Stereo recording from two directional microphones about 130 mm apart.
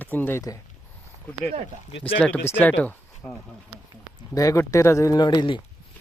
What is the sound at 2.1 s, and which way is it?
Speech, 10° left (ahead or behind).